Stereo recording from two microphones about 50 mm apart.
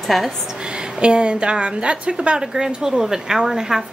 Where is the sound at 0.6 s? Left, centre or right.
Centre.